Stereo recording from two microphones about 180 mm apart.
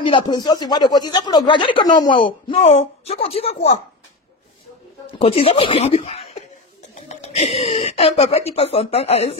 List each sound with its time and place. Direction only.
0.0 s speech: 25° left (ahead or behind)
5.2 s speech: 35° left (ahead or behind)